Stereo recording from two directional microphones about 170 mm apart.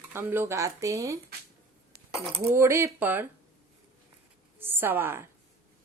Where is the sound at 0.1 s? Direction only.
15° right (ahead or behind).